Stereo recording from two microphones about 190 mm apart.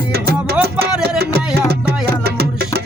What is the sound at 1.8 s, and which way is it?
Music, 55° right (ahead or behind).